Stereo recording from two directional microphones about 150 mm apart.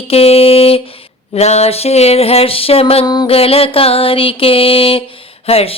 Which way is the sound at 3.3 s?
40° left (ahead or behind).